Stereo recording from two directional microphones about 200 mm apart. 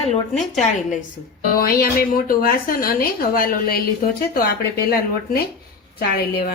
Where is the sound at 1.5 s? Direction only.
50° left (ahead or behind).